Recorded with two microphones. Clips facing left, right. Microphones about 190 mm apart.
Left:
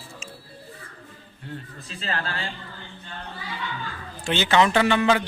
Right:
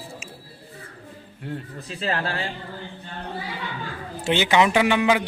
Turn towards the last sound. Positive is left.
turn(degrees=-15)  # may be behind; listen again after turning